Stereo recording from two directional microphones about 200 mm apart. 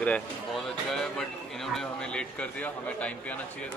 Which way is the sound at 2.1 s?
5° left (ahead or behind).